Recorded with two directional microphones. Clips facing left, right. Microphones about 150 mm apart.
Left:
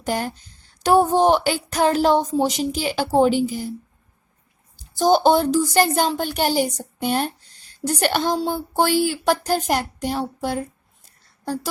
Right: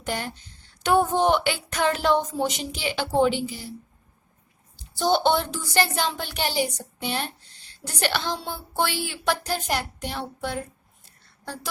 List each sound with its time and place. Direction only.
0.0 s speech: 40° left (ahead or behind)
4.8 s a woman's voice: 40° left (ahead or behind)